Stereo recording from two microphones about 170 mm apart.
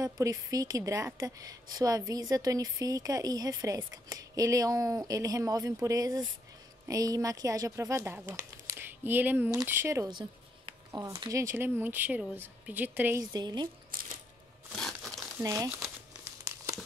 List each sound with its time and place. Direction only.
0.0 s a woman's voice: 20° right (ahead or behind)
13.2 s a woman's voice: 25° right (ahead or behind)
13.9 s a sound: 55° right (ahead or behind)
14.8 s crumpling: centre (ahead or behind)
15.3 s speech: 20° right (ahead or behind)